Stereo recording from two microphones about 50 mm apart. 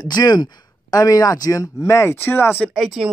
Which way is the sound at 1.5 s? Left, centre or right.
Left.